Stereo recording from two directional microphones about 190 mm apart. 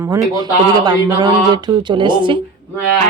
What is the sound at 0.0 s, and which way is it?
Speech, 20° right (ahead or behind).